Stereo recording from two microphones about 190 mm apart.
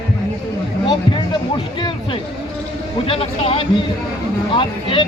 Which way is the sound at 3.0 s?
30° left (ahead or behind).